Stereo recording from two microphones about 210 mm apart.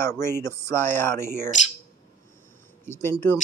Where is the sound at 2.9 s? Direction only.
10° left (ahead or behind).